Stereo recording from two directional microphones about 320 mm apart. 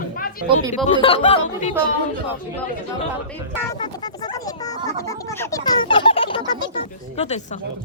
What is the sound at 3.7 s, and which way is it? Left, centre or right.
Speech, centre.